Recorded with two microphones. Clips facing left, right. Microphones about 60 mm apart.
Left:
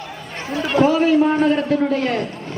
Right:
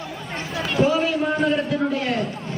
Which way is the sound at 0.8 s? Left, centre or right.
Left.